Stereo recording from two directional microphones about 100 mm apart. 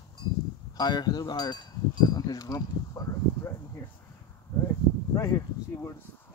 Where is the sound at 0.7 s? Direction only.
45° left (ahead or behind).